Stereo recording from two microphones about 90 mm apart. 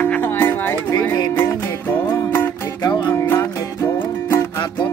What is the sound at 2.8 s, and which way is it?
Music, 55° left (ahead or behind).